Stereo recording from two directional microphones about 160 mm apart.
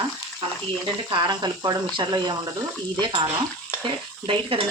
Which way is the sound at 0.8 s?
30° right (ahead or behind).